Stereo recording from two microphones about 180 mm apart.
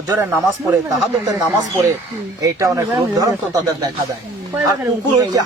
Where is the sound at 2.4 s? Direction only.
20° right (ahead or behind).